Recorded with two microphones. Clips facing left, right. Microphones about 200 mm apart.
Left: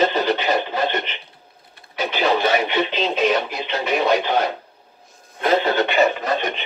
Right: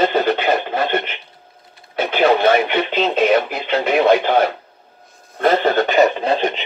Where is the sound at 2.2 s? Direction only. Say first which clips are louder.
Right 5 dB; 55° right (ahead or behind).